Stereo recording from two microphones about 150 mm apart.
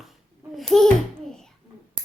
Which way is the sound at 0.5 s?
Centre (ahead or behind).